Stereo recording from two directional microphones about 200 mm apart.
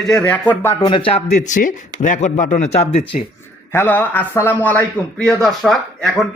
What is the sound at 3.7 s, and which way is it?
A man's voice, 10° left (ahead or behind).